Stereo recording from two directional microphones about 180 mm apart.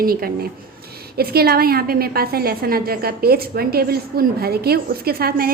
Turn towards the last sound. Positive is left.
turn(degrees=-55)  # may be behind; listen again after turning